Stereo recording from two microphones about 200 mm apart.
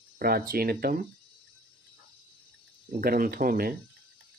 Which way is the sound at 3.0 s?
50° right (ahead or behind).